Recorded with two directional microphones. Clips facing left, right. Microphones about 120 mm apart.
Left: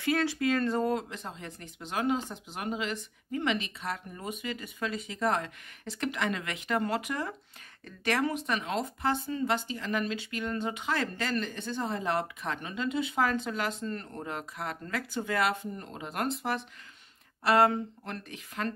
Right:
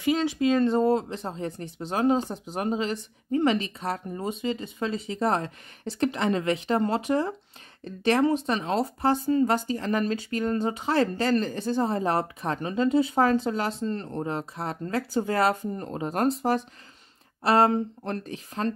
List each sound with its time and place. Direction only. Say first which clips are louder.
0.0 s speech: right 4 dB; 20° right (ahead or behind); by 18.7 s 35° right (ahead or behind)